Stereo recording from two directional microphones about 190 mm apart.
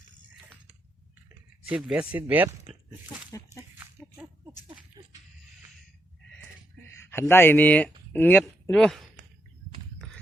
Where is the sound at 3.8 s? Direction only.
15° right (ahead or behind).